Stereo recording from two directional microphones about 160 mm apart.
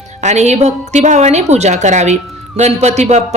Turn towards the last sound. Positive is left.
turn(degrees=-45)  # may be behind; listen again after turning